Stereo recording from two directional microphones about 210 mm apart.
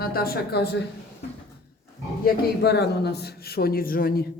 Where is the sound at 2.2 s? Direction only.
50° left (ahead or behind).